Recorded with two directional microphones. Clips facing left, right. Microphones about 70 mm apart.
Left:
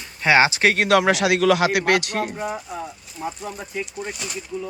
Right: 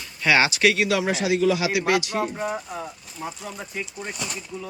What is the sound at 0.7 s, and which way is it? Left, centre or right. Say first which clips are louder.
A man's voice: left 5 dB; left.